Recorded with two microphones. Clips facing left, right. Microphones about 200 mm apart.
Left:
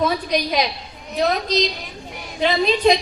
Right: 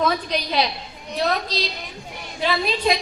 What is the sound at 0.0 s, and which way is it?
Speech, 10° left (ahead or behind).